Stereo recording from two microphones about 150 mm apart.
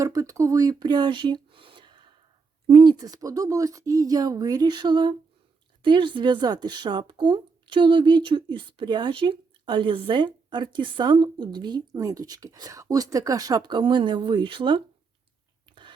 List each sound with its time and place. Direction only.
0.0 s speech: 20° right (ahead or behind)
15.7 s chewing: 30° right (ahead or behind)